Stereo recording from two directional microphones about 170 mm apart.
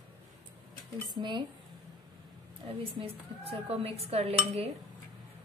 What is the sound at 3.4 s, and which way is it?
Dishes, 35° right (ahead or behind).